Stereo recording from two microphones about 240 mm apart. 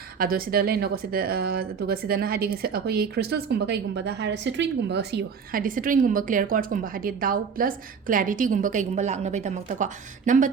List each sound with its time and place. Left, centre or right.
0.2 s speech: right